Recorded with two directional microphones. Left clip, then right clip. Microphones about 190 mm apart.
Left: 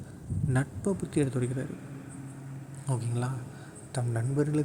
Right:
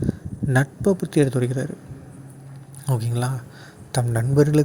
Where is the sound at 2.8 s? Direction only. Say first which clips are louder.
Right 8 dB; 35° right (ahead or behind).